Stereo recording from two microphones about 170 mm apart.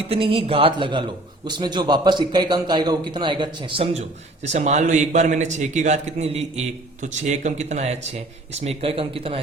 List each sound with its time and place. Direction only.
0.1 s a man's voice: 30° right (ahead or behind)